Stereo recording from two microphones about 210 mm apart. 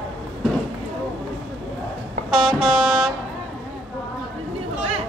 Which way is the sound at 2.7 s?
5° right (ahead or behind).